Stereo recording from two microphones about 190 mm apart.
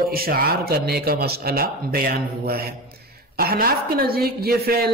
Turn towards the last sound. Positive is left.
turn(degrees=-55)  # may be behind; listen again after turning